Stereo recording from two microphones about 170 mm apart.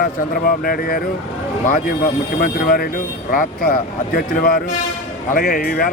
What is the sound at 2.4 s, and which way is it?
Speech, 55° left (ahead or behind).